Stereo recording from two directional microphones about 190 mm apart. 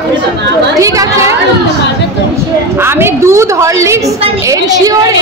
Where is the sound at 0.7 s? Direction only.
15° right (ahead or behind).